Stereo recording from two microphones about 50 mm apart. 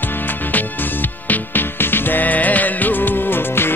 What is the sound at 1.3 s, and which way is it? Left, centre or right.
Music, left.